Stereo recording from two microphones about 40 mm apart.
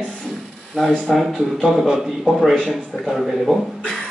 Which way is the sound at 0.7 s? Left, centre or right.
Centre.